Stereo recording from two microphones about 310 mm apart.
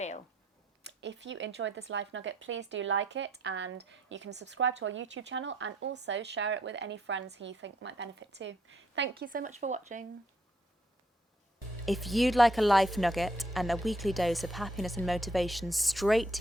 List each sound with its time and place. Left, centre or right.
0.9 s speech: right
11.9 s speech: centre